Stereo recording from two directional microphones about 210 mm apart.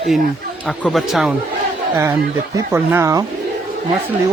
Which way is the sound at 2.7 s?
10° right (ahead or behind).